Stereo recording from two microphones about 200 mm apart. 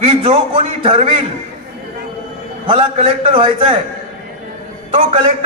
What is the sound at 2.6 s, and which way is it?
A man's voice, 30° right (ahead or behind).